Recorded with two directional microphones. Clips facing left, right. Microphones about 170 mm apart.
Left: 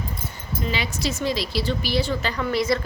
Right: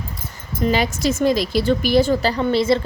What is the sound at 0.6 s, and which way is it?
A woman's voice, 45° right (ahead or behind).